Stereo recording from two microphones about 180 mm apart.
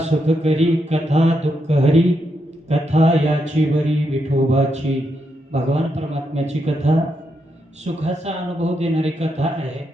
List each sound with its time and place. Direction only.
0.0 s speech: 35° right (ahead or behind)
8.0 s speech: 35° right (ahead or behind)